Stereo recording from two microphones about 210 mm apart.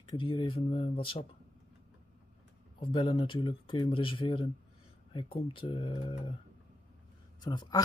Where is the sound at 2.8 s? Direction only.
25° left (ahead or behind).